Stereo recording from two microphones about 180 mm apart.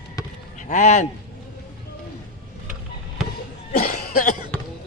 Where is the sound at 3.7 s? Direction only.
55° left (ahead or behind).